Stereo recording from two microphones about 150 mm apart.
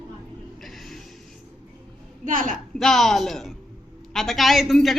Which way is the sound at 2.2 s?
60° right (ahead or behind).